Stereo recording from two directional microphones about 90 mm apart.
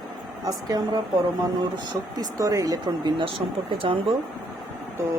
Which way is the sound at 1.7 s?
55° right (ahead or behind).